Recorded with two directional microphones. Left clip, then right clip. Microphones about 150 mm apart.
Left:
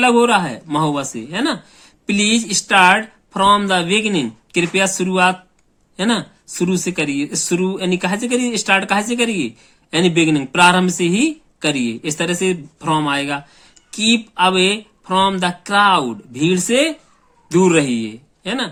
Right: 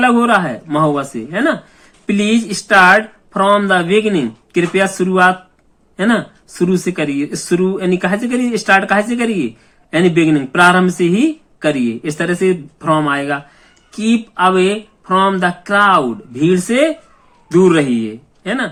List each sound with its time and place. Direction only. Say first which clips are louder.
0.0 s speech: right 1 dB; 35° left (ahead or behind)